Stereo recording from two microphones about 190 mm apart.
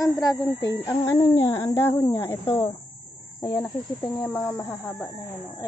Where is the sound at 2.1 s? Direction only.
25° left (ahead or behind).